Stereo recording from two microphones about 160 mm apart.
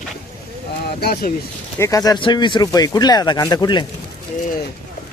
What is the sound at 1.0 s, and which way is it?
Speech, 80° left.